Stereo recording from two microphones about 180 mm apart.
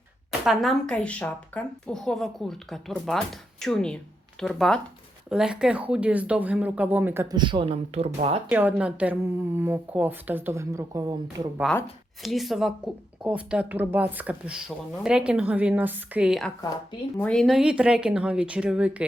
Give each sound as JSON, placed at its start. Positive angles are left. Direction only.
{"t": 0.3, "sound": "speech", "side_deg": 0}
{"t": 7.3, "sound": "speech", "side_deg": -30}
{"t": 8.4, "sound": "speech", "side_deg": -10}
{"t": 12.2, "sound": "speech", "side_deg": 0}